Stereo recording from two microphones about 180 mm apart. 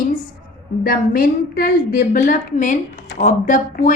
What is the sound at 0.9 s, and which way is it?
A woman's voice, 55° left (ahead or behind).